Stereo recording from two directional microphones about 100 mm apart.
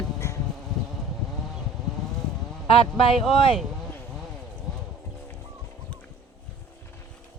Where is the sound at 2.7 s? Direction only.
65° left (ahead or behind).